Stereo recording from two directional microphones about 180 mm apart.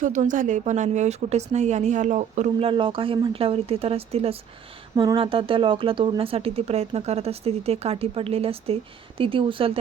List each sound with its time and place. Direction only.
0.0 s speech: 45° right (ahead or behind); by 9.7 s 30° right (ahead or behind)